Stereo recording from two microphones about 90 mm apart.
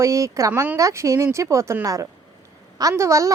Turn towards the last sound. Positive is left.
turn(degrees=-35)  # may be behind; listen again after turning